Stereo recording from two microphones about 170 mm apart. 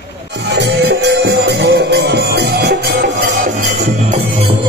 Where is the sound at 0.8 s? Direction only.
90° right.